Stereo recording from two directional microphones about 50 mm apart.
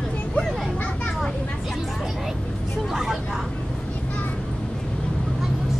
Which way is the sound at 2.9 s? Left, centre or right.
Centre.